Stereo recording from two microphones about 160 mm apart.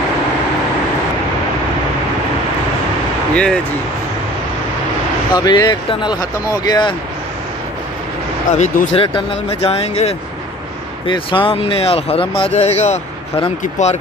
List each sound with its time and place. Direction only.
5.3 s speech: 25° left (ahead or behind)
8.5 s speech: 50° left (ahead or behind)
9.0 s speech: 35° left (ahead or behind)